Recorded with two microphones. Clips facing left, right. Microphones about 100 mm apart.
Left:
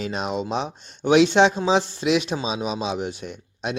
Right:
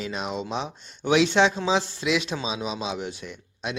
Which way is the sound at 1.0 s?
55° left (ahead or behind).